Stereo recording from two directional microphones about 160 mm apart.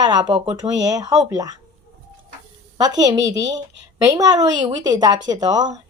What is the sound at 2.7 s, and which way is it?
Speech, 25° right (ahead or behind).